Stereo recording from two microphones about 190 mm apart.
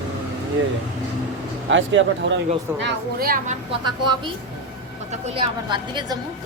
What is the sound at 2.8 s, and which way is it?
Speech, 50° right (ahead or behind).